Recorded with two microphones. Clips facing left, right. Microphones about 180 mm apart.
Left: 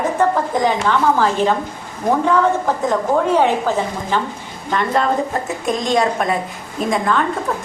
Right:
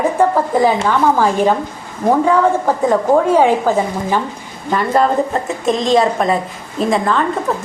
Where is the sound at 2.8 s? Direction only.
10° right (ahead or behind).